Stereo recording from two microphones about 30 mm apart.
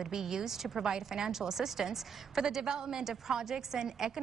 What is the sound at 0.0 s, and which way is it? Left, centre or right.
A woman's voice, centre.